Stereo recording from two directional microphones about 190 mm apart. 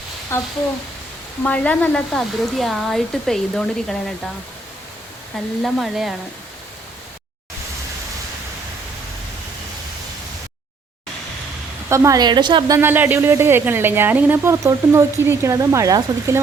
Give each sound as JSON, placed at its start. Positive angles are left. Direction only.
{"t": 0.3, "sound": "speech", "side_deg": 15}
{"t": 5.6, "sound": "speech", "side_deg": 0}
{"t": 11.9, "sound": "a woman's voice", "side_deg": -15}